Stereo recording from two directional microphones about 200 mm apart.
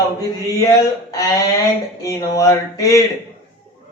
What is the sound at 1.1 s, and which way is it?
Speech, 15° left (ahead or behind).